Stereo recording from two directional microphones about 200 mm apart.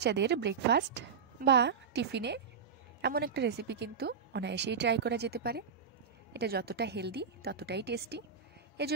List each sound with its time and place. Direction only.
0.0 s a woman's voice: 60° right (ahead or behind)